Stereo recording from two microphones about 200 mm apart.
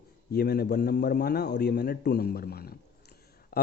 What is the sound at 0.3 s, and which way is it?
A man's voice, 50° left (ahead or behind).